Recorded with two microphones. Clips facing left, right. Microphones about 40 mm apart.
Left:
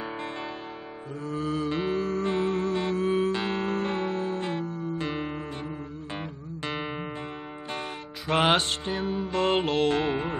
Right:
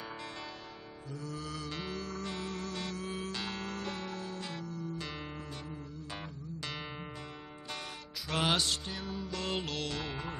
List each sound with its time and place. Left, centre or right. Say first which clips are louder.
1.2 s music: left 13 dB; left
6.6 s music: left 10 dB; left
8.3 s music: left 8 dB; left